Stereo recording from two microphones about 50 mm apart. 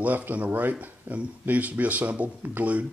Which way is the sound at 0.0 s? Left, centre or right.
Right.